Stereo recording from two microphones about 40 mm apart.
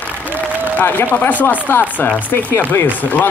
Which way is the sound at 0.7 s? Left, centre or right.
Left.